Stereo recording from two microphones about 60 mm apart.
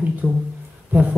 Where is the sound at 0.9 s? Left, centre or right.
Right.